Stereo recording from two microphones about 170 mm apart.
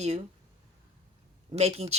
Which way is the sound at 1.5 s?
40° right (ahead or behind).